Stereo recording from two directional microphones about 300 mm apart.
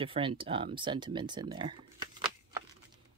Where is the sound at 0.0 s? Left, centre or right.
Centre.